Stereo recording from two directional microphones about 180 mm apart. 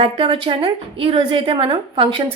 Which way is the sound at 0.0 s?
25° right (ahead or behind).